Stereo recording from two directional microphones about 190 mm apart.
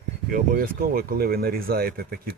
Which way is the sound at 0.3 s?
50° right (ahead or behind).